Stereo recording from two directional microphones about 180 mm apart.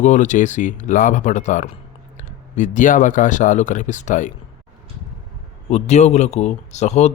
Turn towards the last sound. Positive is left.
turn(degrees=40)  # may be behind; listen again after turning